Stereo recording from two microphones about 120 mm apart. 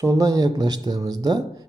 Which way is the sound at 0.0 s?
30° right (ahead or behind).